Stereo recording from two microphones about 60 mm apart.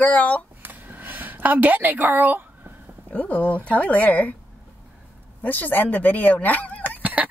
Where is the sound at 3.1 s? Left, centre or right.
Left.